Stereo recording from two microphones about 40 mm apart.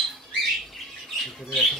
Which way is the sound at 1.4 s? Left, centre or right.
Centre.